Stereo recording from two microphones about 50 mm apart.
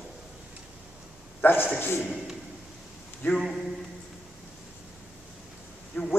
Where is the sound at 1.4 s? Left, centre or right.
Left.